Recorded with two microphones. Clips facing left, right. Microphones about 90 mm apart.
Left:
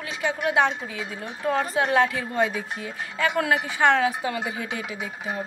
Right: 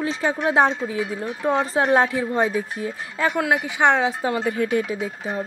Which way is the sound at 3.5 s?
20° right (ahead or behind).